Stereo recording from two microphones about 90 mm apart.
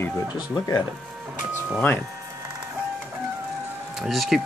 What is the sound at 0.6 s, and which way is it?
Speech, 45° left (ahead or behind).